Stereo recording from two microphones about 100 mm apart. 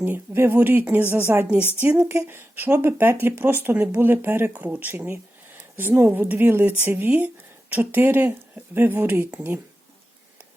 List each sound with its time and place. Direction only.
0.0 s a woman's voice: 20° right (ahead or behind)